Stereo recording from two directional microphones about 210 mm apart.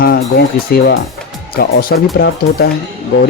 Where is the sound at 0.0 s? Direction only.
45° left (ahead or behind).